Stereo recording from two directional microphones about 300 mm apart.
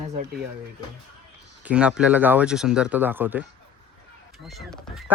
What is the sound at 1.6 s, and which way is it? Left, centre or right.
Speech, centre.